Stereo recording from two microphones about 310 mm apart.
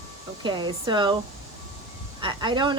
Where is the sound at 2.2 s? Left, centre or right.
Centre.